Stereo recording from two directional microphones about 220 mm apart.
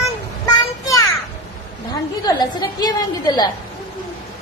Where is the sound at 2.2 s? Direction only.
20° left (ahead or behind).